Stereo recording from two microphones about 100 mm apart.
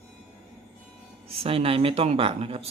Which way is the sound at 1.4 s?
70° right (ahead or behind).